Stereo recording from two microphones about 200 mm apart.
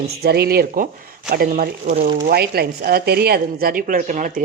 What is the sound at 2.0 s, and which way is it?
Speech, 50° right (ahead or behind).